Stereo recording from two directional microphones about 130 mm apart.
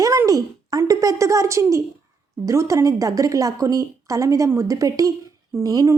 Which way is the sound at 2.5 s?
25° right (ahead or behind).